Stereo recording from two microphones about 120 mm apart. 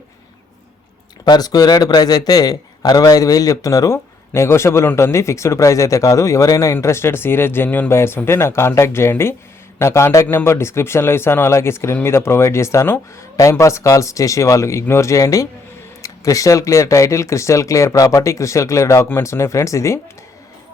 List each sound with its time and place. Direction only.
1.2 s a man's voice: 35° left (ahead or behind)